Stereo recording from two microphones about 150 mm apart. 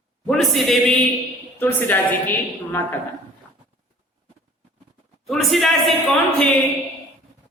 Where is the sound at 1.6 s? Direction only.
10° left (ahead or behind).